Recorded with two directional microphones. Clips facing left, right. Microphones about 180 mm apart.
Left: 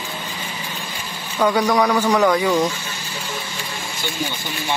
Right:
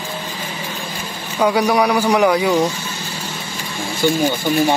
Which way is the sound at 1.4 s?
10° right (ahead or behind).